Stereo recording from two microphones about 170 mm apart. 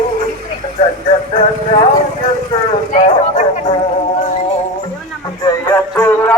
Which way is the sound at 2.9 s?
45° left (ahead or behind).